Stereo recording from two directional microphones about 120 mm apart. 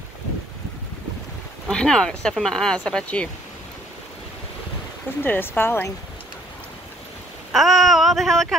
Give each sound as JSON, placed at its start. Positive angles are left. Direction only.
{"t": 1.7, "sound": "speech", "side_deg": 5}
{"t": 5.2, "sound": "speech", "side_deg": 15}
{"t": 7.5, "sound": "a sound", "side_deg": 0}